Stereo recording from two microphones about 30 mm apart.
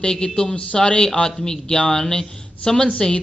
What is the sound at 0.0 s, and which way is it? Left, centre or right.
Speech, left.